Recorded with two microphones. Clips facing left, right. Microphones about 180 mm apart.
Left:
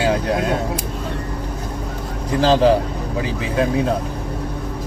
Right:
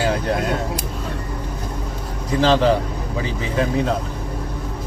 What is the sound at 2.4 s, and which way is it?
Speech, 35° left (ahead or behind).